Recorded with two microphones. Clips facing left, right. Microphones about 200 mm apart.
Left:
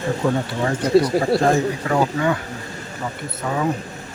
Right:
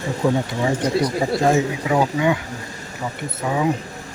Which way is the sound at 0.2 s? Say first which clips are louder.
Right 2 dB; 10° right (ahead or behind).